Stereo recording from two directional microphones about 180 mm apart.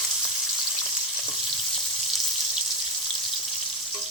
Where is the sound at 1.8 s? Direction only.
Centre (ahead or behind).